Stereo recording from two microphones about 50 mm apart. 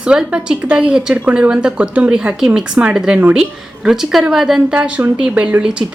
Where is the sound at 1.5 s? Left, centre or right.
Centre.